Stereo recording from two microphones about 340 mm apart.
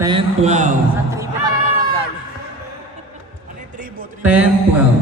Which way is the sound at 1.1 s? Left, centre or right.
Centre.